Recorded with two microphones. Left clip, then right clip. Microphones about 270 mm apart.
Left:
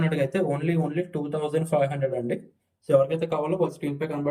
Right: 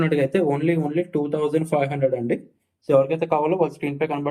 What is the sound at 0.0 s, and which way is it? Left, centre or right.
Speech, centre.